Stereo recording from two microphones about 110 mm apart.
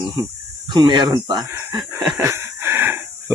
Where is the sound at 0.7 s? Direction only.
40° right (ahead or behind).